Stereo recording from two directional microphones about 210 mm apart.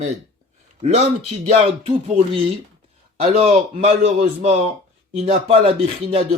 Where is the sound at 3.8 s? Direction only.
30° right (ahead or behind).